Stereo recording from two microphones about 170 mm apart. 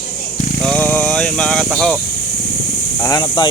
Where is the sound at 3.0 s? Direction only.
25° left (ahead or behind).